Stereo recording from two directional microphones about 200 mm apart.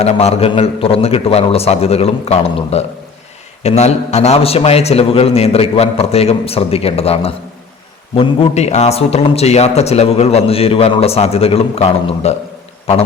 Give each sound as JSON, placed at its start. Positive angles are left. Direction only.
{"t": 0.0, "sound": "a man's voice", "side_deg": 30}